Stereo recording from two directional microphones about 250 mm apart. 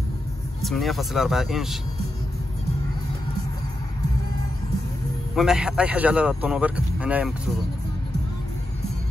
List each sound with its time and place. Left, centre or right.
0.7 s speech: centre
5.3 s speech: centre